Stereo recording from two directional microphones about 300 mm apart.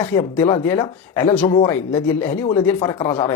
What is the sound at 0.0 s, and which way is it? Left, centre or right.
Speech, centre.